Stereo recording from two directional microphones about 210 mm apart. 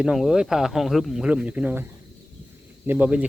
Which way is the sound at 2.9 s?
5° right (ahead or behind).